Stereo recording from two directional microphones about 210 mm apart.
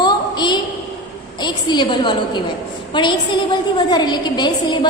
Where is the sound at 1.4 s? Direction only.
20° left (ahead or behind).